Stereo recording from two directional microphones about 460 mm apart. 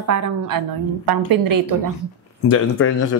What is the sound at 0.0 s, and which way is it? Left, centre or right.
A woman's voice, right.